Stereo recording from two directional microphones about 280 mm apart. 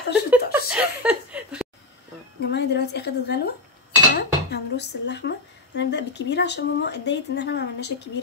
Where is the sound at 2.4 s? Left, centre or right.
Left.